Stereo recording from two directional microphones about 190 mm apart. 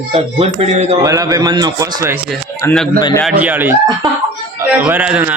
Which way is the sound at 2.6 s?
15° left (ahead or behind).